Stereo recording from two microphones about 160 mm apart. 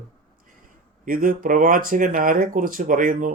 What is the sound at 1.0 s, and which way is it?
Speech, 60° right (ahead or behind).